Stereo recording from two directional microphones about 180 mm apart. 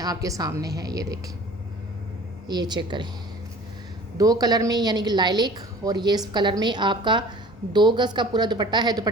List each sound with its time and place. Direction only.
0.0 s a woman's voice: 20° right (ahead or behind)
2.5 s a woman's voice: 25° right (ahead or behind)
4.2 s a woman's voice: 20° right (ahead or behind)